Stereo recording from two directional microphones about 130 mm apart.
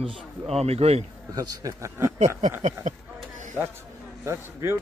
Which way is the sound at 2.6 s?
65° right (ahead or behind).